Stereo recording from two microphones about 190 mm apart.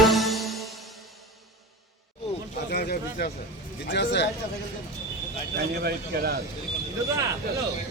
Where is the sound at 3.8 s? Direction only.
70° left (ahead or behind).